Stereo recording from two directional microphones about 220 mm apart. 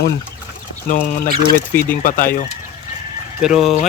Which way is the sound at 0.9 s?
40° left (ahead or behind).